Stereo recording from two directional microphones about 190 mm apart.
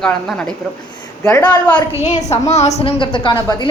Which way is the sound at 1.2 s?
15° left (ahead or behind).